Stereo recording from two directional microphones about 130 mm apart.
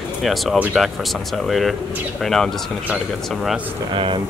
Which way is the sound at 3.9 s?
40° right (ahead or behind).